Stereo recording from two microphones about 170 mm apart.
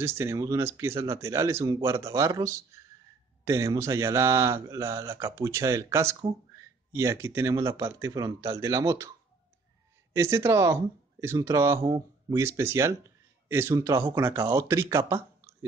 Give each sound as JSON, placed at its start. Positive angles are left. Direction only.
{"t": 0.0, "sound": "speech", "side_deg": -15}
{"t": 10.1, "sound": "speech", "side_deg": -15}